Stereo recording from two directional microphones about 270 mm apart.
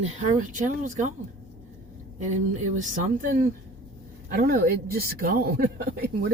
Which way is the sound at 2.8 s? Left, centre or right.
Right.